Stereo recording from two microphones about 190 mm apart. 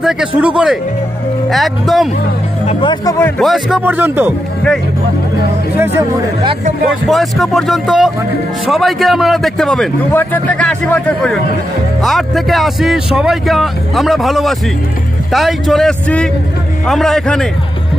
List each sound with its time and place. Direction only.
0.4 s a man's voice: 5° right (ahead or behind)
2.6 s speech: 30° left (ahead or behind)
3.2 s a man's voice: 10° left (ahead or behind)
3.4 s speech: centre (ahead or behind)
7.1 s a man's voice: centre (ahead or behind)